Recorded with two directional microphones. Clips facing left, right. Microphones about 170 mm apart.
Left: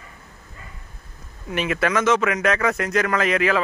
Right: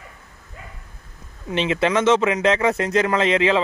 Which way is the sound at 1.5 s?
25° right (ahead or behind).